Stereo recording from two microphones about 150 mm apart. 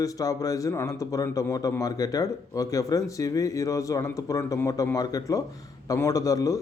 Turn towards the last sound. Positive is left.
turn(degrees=25)  # may be behind; listen again after turning